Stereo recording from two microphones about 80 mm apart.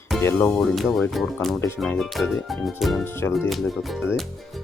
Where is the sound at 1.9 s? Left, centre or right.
Centre.